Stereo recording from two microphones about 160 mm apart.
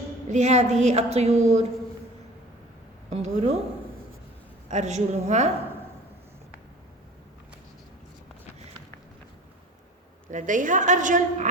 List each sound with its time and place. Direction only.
0.3 s a woman's voice: 45° right (ahead or behind)
3.1 s a woman's voice: 45° right (ahead or behind)
4.7 s a woman's voice: 45° right (ahead or behind)
10.3 s a woman's voice: 55° right (ahead or behind)